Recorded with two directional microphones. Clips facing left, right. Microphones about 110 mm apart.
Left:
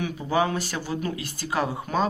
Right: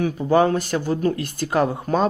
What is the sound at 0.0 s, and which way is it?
Speech, 45° right (ahead or behind).